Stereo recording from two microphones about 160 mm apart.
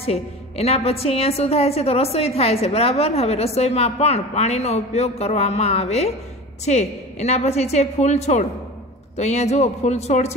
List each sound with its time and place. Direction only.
0.0 s a woman's voice: 40° left (ahead or behind)